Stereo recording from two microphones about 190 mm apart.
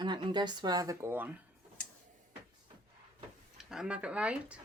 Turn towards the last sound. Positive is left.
turn(degrees=-5)  # may be behind; listen again after turning